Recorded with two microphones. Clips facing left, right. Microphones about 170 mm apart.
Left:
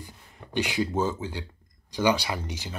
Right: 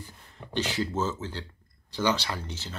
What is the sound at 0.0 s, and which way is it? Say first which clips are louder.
Speech: even; 15° left (ahead or behind).